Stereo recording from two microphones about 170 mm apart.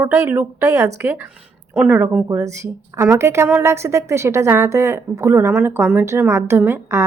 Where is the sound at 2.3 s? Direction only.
20° right (ahead or behind).